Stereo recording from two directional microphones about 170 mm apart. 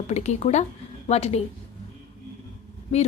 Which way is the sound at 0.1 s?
40° left (ahead or behind).